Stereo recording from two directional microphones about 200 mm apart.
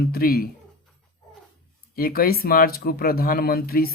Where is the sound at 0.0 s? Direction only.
50° left (ahead or behind).